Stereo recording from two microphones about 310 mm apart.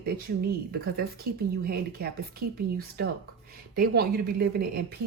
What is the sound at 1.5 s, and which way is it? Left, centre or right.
Speech, right.